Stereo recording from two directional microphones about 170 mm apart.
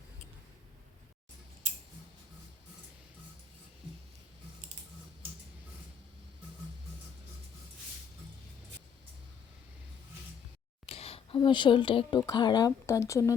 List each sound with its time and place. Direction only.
10.8 s speech: 35° left (ahead or behind); by 13.3 s 20° left (ahead or behind)